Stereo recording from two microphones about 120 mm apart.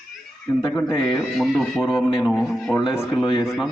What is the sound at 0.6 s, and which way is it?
Speech, 25° left (ahead or behind).